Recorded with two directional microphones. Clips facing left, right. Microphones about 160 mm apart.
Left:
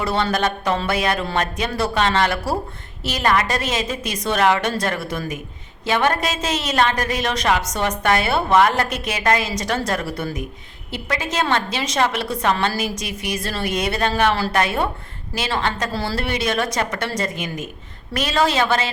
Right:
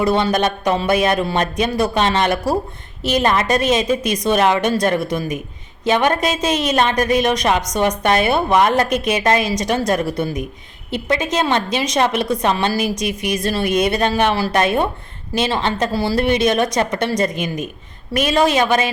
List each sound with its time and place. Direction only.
0.0 s a woman's voice: 15° right (ahead or behind)